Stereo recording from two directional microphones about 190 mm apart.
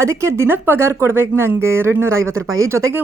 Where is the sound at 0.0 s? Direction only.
15° right (ahead or behind).